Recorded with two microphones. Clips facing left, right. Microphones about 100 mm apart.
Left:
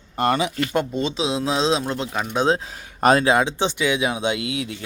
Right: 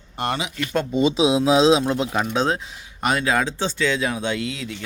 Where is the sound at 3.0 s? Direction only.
35° left (ahead or behind).